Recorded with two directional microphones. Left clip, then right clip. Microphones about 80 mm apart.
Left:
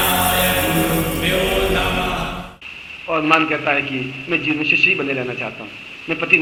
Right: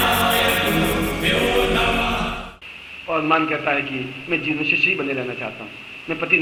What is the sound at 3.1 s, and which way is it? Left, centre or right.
A man's voice, left.